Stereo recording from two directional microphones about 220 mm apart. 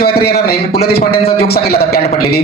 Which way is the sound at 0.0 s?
45° left (ahead or behind).